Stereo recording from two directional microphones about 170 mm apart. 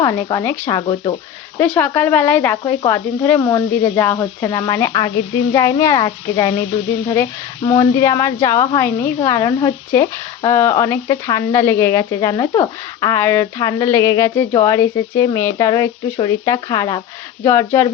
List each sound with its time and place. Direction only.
0.0 s speech: 15° left (ahead or behind)
0.8 s a woman's voice: 25° left (ahead or behind)
1.5 s a woman's voice: 5° left (ahead or behind)